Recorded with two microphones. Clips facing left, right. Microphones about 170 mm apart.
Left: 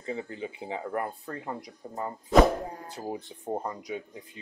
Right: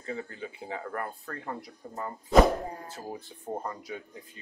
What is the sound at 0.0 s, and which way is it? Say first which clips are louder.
Speech: left 2 dB; 20° left (ahead or behind).